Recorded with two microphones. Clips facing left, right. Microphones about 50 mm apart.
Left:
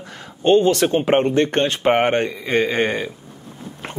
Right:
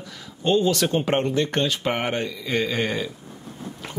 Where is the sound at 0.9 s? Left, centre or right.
Left.